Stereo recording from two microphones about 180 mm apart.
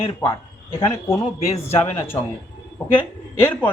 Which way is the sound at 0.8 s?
20° left (ahead or behind).